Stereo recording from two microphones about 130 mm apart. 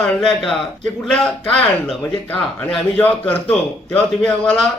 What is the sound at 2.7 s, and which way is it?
A man's voice, 10° left (ahead or behind).